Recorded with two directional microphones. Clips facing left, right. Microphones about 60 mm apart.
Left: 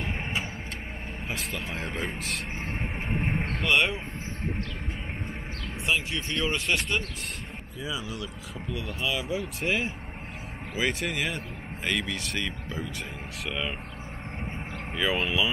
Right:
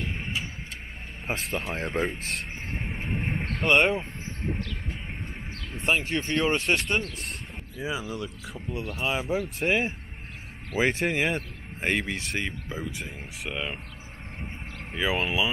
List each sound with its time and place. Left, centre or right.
1.5 s speech: right
2.8 s music: centre
3.6 s speech: right
5.8 s speech: right; by 13.7 s centre
15.0 s speech: centre